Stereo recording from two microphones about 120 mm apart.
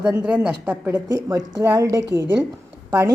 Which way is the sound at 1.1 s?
30° right (ahead or behind).